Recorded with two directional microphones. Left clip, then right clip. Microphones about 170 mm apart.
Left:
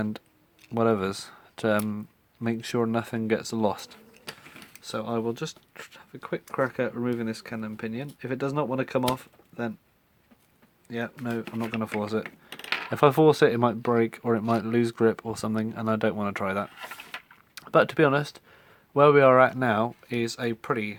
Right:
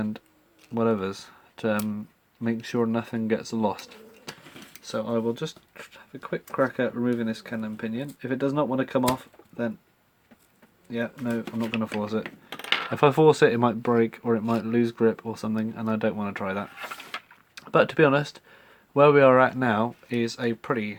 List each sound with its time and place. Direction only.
0.7 s speech: 45° left (ahead or behind)
10.9 s speech: 50° left (ahead or behind)